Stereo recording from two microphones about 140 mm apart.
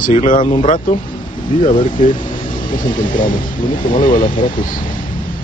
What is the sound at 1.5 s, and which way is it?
Speech, 75° left (ahead or behind).